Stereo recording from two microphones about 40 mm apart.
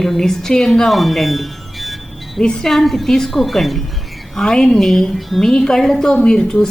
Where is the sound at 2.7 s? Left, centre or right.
Centre.